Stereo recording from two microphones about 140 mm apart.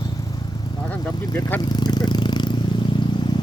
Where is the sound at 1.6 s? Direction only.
30° left (ahead or behind).